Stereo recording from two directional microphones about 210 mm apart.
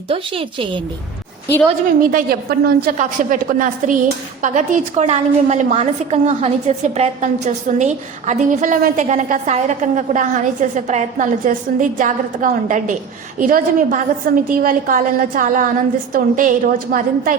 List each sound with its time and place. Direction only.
0.1 s a woman's voice: 25° right (ahead or behind)
2.0 s a woman's voice: 45° right (ahead or behind)